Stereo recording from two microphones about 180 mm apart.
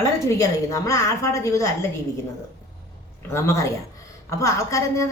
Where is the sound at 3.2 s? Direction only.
15° left (ahead or behind).